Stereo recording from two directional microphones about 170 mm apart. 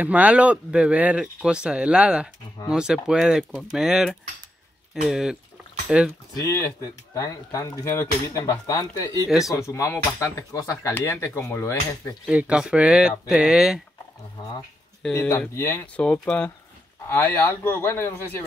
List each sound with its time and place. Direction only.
0.0 s speech: 10° right (ahead or behind)
6.3 s speech: 20° left (ahead or behind)
9.3 s speech: centre (ahead or behind)
9.6 s speech: 20° left (ahead or behind)
12.3 s speech: 5° right (ahead or behind)
15.1 s speech: 15° left (ahead or behind)